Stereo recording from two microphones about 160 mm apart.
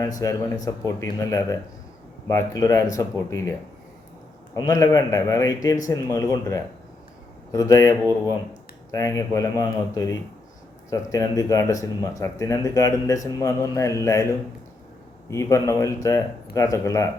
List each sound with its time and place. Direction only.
0.2 s speech: 20° left (ahead or behind)
4.5 s speech: 20° left (ahead or behind)
15.3 s speech: 20° left (ahead or behind)